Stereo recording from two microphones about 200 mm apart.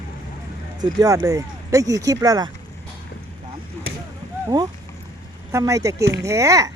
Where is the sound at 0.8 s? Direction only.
15° right (ahead or behind).